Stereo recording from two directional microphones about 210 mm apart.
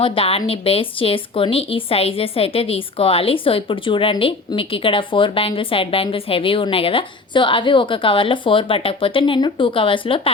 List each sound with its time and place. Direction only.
0.0 s speech: 25° left (ahead or behind)